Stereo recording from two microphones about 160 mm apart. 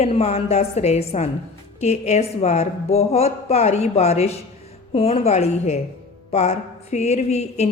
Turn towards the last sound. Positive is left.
turn(degrees=45)  # may be behind; listen again after turning